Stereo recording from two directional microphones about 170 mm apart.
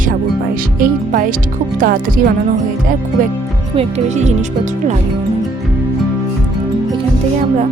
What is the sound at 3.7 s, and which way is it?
Speech, 40° right (ahead or behind).